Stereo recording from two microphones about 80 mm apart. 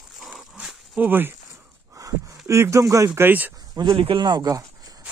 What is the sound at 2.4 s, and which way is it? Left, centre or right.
Speech, right.